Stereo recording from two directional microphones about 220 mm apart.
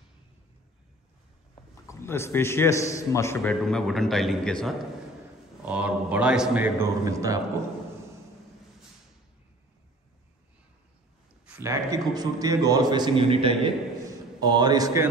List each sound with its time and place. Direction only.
1.5 s a man's voice: 10° left (ahead or behind)
3.6 s a man's voice: centre (ahead or behind); by 7.3 s 15° right (ahead or behind)
11.4 s a man's voice: 10° right (ahead or behind)